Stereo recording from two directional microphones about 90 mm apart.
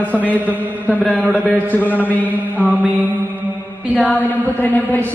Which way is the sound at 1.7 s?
20° left (ahead or behind).